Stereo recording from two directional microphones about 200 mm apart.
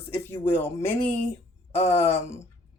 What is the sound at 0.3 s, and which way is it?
Speech, 10° left (ahead or behind).